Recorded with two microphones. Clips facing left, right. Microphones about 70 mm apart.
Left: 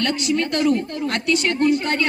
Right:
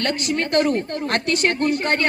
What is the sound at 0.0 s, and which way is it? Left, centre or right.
A woman's voice, right.